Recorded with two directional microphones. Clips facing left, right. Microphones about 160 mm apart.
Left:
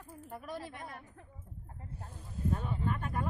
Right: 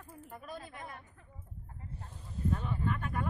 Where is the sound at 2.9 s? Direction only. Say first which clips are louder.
Even; 35° left (ahead or behind).